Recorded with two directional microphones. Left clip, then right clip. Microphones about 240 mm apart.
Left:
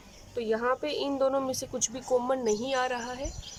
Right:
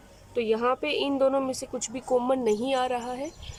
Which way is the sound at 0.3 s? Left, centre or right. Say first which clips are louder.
Right 3 dB; centre.